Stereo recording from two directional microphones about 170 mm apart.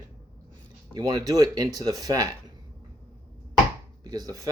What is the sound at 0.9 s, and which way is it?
Speech, 20° right (ahead or behind).